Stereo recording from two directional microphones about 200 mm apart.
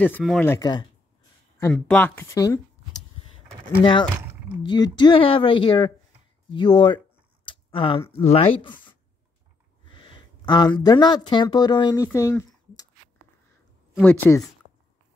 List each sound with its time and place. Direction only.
0.2 s speech: centre (ahead or behind)
0.5 s speech: 20° left (ahead or behind)
1.6 s speech: 5° left (ahead or behind)
4.6 s speech: 20° left (ahead or behind)
7.4 s a sound: 25° left (ahead or behind)
8.1 s speech: 30° left (ahead or behind)
9.9 s speech: 25° left (ahead or behind)
13.9 s speech: 10° left (ahead or behind)